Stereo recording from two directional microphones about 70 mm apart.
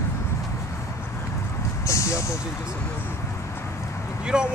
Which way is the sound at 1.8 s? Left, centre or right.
Left.